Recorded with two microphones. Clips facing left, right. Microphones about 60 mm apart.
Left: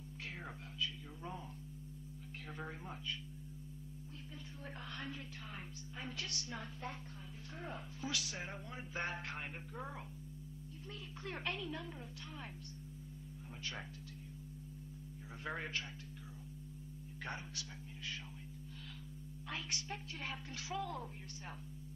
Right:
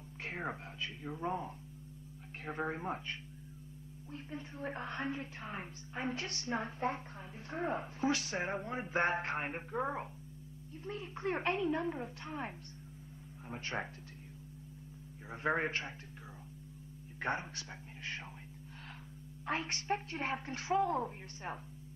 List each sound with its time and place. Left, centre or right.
0.2 s a woman's voice: right
15.2 s a woman's voice: right
17.2 s speech: right
19.4 s a woman's voice: right